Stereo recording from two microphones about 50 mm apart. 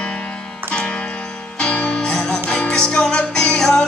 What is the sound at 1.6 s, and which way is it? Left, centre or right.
Music, left.